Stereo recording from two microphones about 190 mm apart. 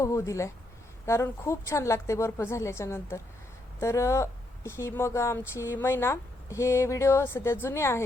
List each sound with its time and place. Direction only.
0.0 s speech: 15° left (ahead or behind)